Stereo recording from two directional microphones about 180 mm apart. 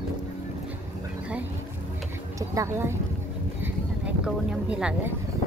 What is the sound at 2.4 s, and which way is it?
Speech, 15° right (ahead or behind).